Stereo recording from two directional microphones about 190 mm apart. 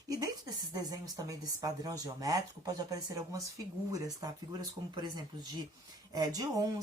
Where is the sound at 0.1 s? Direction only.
20° right (ahead or behind).